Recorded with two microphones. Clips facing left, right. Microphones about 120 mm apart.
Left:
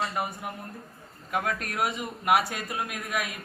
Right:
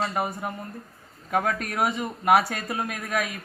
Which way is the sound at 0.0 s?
Centre (ahead or behind).